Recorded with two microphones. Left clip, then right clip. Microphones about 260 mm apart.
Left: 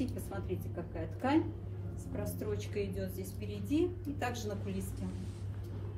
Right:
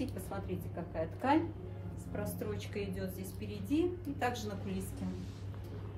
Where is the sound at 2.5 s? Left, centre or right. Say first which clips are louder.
Left 3 dB; centre.